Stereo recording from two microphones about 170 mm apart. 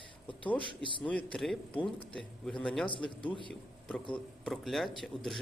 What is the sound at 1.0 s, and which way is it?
A man's voice, 5° left (ahead or behind).